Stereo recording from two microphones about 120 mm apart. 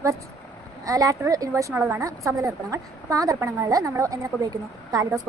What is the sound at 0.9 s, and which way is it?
A woman's voice, 30° right (ahead or behind).